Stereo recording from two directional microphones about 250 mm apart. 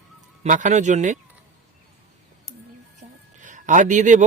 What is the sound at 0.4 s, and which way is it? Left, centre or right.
Speech, right.